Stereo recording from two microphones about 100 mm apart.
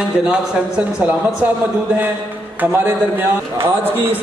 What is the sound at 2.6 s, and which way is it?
A man's voice, 20° right (ahead or behind).